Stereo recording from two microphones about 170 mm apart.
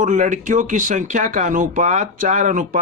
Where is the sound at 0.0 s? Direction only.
50° right (ahead or behind).